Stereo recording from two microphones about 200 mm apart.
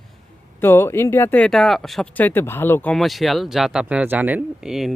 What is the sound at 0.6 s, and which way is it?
Speech, 10° left (ahead or behind).